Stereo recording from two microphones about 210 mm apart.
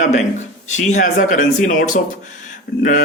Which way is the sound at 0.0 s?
35° left (ahead or behind).